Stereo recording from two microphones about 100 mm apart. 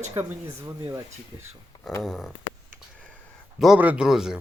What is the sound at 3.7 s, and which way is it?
Speech, 15° right (ahead or behind).